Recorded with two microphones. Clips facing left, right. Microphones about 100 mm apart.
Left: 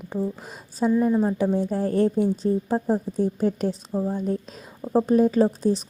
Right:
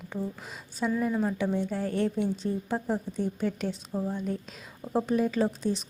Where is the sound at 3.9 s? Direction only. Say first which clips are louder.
Left 5 dB; 25° left (ahead or behind).